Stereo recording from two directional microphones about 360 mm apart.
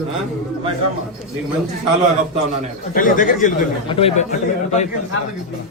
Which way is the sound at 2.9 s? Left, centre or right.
Left.